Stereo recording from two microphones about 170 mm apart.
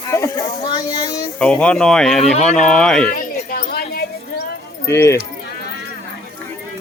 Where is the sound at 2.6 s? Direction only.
5° left (ahead or behind).